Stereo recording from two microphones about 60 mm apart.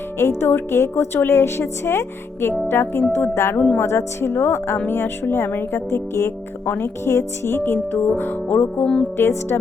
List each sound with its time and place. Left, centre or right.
0.2 s a woman's voice: left
3.5 s speech: left
3.8 s a woman's voice: left
8.8 s speech: centre
9.1 s speech: left